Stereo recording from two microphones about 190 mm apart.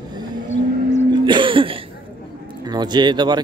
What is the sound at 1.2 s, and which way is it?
Speech, 25° right (ahead or behind).